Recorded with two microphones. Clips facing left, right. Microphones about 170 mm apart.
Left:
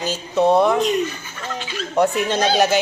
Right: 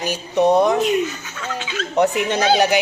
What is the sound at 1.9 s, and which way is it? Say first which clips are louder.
Speech: even; 20° right (ahead or behind).